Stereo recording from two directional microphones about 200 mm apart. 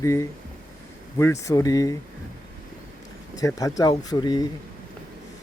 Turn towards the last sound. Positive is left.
turn(degrees=20)  # may be behind; listen again after turning